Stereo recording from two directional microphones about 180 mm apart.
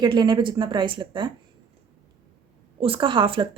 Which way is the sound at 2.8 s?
30° right (ahead or behind).